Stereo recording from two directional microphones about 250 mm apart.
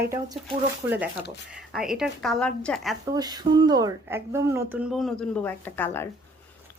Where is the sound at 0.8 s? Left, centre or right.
Centre.